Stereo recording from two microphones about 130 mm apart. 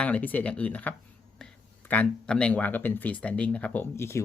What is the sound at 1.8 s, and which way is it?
Speech, 10° left (ahead or behind).